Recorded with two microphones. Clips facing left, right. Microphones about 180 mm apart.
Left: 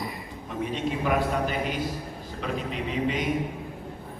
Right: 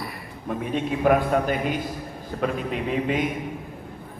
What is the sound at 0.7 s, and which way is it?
A man's voice, 50° right (ahead or behind).